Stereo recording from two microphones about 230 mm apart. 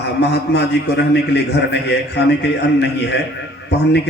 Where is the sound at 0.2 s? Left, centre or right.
Left.